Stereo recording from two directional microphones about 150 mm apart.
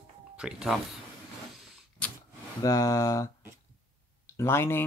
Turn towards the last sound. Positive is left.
turn(degrees=15)  # may be behind; listen again after turning